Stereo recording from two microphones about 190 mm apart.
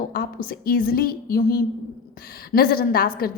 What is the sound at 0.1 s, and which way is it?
A woman's voice, 50° left (ahead or behind).